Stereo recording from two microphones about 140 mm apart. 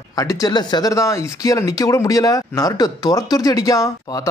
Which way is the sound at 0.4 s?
30° left (ahead or behind).